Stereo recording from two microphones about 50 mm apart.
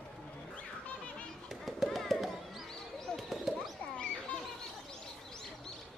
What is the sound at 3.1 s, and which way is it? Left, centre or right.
Bird, centre.